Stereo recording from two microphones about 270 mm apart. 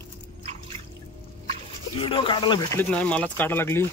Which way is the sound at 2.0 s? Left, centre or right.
Centre.